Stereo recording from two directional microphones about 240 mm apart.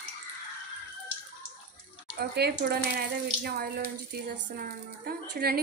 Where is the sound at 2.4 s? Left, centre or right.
Right.